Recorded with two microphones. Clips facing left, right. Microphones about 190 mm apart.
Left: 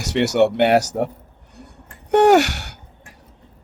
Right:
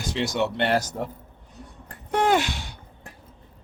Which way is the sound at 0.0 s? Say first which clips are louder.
Left 9 dB; 75° left (ahead or behind).